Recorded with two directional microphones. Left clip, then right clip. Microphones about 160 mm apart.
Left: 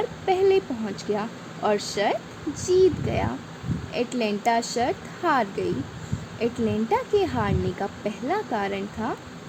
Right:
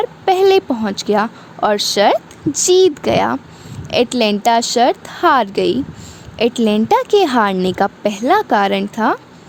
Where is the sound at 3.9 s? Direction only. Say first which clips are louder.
Right 12 dB; 75° right (ahead or behind).